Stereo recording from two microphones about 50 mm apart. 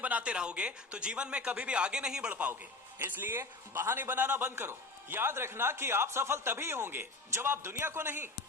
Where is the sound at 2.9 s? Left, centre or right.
Right.